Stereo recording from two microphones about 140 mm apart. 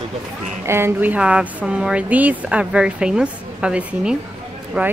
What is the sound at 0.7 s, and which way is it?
Speech, 15° right (ahead or behind).